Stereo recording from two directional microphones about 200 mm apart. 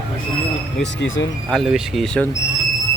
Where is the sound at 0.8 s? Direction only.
65° left (ahead or behind).